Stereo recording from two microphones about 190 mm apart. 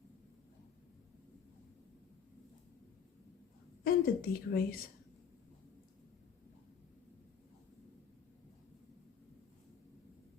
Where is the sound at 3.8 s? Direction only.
50° left (ahead or behind).